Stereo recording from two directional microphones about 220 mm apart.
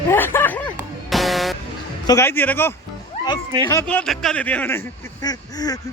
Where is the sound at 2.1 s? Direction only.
10° left (ahead or behind).